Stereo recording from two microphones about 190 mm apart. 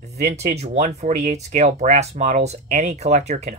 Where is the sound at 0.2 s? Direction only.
35° right (ahead or behind).